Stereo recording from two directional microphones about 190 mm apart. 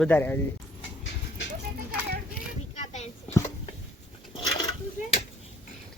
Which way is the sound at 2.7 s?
35° left (ahead or behind).